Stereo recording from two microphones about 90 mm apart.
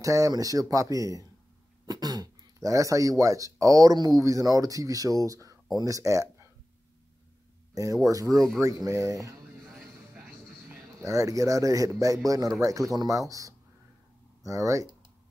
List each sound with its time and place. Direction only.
0.0 s speech: 40° right (ahead or behind)
7.7 s speech: 40° right (ahead or behind)
11.0 s speech: 35° right (ahead or behind)